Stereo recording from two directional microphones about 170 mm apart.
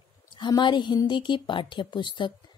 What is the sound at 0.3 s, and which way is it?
A woman's voice, 30° left (ahead or behind).